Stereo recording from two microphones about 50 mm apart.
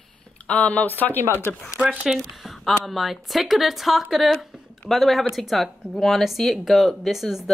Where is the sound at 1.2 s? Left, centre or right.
Right.